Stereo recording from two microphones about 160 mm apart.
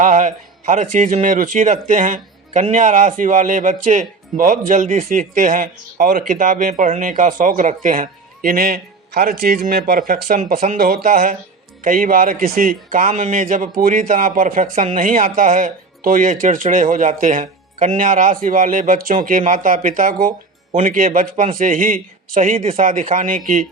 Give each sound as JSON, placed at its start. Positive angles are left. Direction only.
{"t": 0.0, "sound": "a man's voice", "side_deg": -50}
{"t": 22.5, "sound": "speech", "side_deg": -35}
{"t": 22.8, "sound": "a man's voice", "side_deg": -55}